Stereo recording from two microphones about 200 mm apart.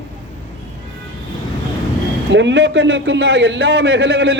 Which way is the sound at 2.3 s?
70° right (ahead or behind).